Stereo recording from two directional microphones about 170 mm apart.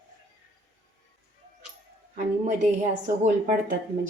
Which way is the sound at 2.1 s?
45° right (ahead or behind).